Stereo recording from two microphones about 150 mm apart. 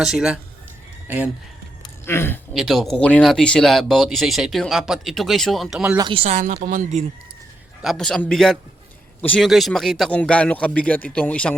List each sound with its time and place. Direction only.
0.0 s speech: 5° right (ahead or behind)
2.0 s a man's voice: 15° left (ahead or behind)
2.5 s speech: centre (ahead or behind)
6.0 s speech: 35° right (ahead or behind)
6.4 s speech: 60° right (ahead or behind)
7.8 s a man's voice: centre (ahead or behind)